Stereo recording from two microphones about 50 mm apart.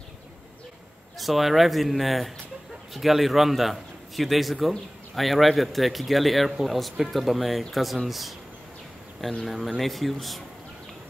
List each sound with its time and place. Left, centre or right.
1.1 s a man's voice: centre
9.8 s a man's voice: centre